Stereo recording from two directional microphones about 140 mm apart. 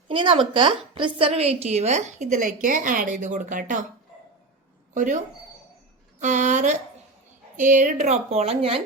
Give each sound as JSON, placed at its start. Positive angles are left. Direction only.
{"t": 0.1, "sound": "a woman's voice", "side_deg": -35}
{"t": 4.9, "sound": "a woman's voice", "side_deg": -65}